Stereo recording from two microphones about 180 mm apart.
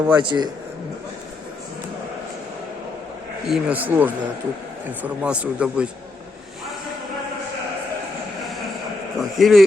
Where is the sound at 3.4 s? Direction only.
5° right (ahead or behind).